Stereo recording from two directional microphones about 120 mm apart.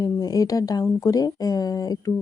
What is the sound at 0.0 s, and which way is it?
Speech, 30° left (ahead or behind).